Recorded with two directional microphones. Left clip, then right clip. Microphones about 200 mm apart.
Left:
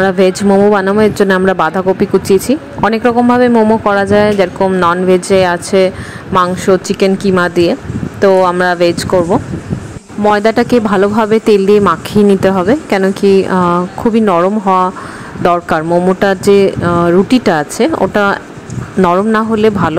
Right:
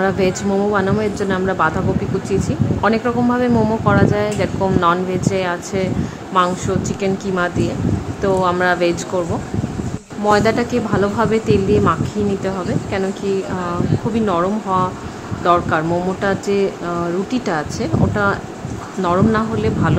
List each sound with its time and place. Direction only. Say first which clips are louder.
0.0 s speech: left 7 dB; 35° left (ahead or behind)
10.3 s speech: left 5 dB; 35° left (ahead or behind)